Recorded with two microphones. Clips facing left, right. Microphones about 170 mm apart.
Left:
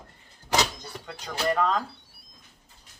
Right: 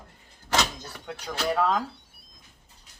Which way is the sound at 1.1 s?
5° right (ahead or behind).